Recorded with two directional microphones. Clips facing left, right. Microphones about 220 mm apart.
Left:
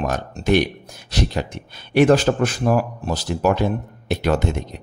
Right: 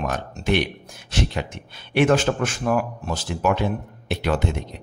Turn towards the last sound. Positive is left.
turn(degrees=45)  # may be behind; listen again after turning